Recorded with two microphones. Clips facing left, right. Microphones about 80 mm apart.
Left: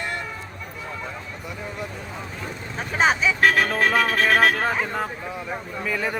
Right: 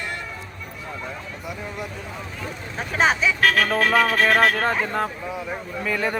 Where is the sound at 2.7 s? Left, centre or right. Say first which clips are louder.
Even; centre.